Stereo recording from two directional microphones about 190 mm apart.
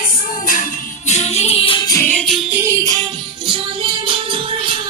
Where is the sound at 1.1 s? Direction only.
35° left (ahead or behind); by 2.4 s 5° left (ahead or behind).